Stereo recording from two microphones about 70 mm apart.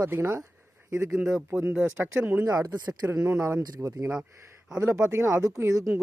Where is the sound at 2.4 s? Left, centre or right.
Right.